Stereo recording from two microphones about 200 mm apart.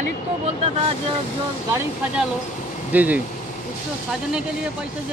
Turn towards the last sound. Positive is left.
turn(degrees=-10)  # may be behind; listen again after turning